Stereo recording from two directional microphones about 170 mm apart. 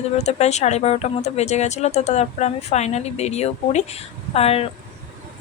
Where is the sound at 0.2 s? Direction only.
40° left (ahead or behind).